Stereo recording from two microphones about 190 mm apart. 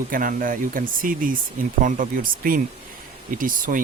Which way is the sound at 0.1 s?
45° right (ahead or behind).